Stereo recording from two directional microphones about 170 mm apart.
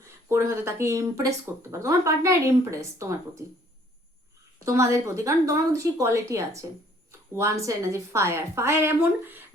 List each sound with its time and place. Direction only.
0.0 s a woman's voice: 15° right (ahead or behind)
4.6 s a woman's voice: 15° right (ahead or behind)